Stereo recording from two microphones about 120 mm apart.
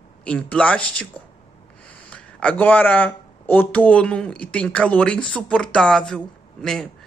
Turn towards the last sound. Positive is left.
turn(degrees=5)  # may be behind; listen again after turning